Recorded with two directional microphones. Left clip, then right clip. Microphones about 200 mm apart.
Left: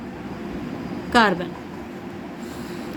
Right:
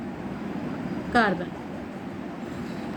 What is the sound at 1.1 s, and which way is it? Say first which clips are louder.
Speech: left 5 dB; 60° left (ahead or behind).